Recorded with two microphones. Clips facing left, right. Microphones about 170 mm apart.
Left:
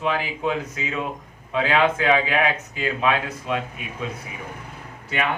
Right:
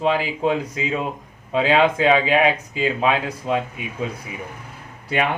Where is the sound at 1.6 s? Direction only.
20° right (ahead or behind).